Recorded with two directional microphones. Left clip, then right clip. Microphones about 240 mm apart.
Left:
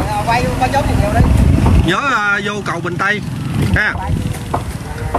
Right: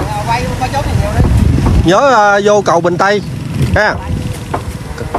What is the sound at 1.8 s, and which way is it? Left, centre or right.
Speech, centre.